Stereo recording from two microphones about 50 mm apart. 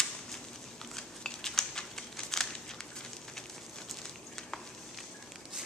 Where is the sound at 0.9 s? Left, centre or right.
Centre.